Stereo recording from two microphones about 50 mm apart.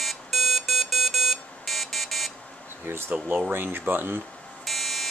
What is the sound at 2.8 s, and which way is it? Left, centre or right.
Speech, right.